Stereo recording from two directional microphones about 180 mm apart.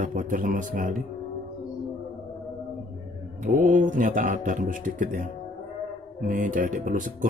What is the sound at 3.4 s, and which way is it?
Speech, 45° right (ahead or behind).